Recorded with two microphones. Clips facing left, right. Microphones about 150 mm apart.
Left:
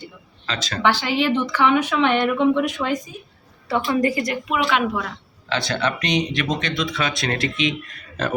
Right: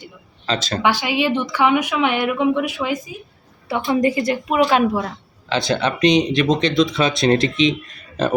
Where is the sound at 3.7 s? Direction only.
20° right (ahead or behind).